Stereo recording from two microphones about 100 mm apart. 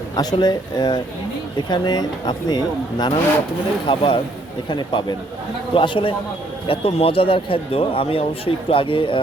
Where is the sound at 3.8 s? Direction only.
60° left (ahead or behind).